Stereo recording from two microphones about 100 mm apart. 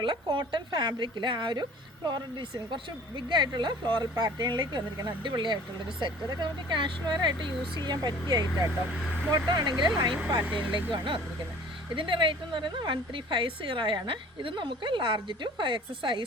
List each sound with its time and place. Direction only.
0.0 s a woman's voice: 55° right (ahead or behind)
3.2 s a woman's voice: 50° right (ahead or behind)
10.4 s speech: 15° right (ahead or behind)
10.9 s a woman's voice: 55° right (ahead or behind)